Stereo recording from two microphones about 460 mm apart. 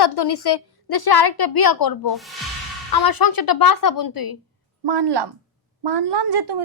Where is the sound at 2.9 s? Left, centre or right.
Left.